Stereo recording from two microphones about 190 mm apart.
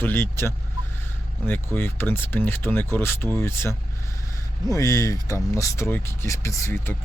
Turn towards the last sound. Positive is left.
turn(degrees=15)  # may be behind; listen again after turning